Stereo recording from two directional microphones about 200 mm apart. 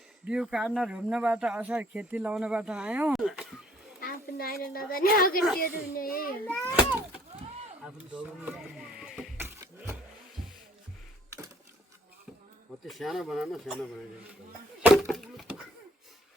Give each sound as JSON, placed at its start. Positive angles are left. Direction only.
{"t": 0.3, "sound": "speech", "side_deg": -5}
{"t": 4.0, "sound": "a child's voice", "side_deg": 50}
{"t": 6.7, "sound": "a sound", "side_deg": -10}
{"t": 7.9, "sound": "rowboat", "side_deg": -5}
{"t": 12.8, "sound": "speech", "side_deg": 0}
{"t": 14.8, "sound": "chop", "side_deg": 0}